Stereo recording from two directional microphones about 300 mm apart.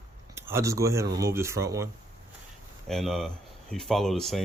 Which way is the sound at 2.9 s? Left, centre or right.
Centre.